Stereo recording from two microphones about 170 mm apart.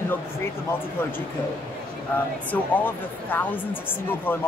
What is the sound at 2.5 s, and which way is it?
Speech, 10° left (ahead or behind).